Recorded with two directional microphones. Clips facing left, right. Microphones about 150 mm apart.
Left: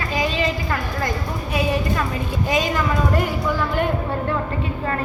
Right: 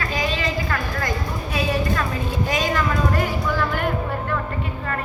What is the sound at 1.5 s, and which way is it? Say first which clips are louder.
Speech: left 1 dB; 20° left (ahead or behind).